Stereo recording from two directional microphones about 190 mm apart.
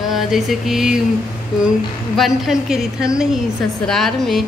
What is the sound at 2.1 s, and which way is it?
Speech, centre (ahead or behind).